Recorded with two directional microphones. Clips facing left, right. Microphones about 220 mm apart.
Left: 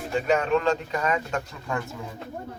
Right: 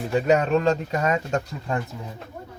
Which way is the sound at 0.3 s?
40° right (ahead or behind).